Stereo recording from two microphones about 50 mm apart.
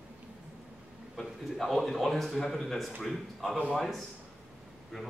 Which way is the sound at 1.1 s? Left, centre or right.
Centre.